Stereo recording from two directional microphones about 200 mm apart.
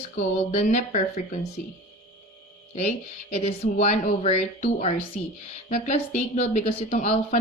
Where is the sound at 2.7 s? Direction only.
30° left (ahead or behind).